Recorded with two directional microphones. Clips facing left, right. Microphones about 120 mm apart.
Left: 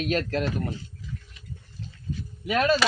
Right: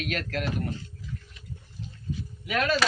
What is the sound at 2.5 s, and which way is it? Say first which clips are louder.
Speech: left 4 dB; 35° left (ahead or behind).